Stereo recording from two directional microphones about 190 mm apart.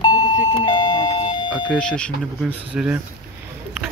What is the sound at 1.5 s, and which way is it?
Smoke detector, 5° right (ahead or behind).